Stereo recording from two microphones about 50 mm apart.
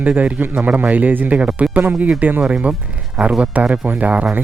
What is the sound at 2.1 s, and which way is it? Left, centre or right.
Speech, right.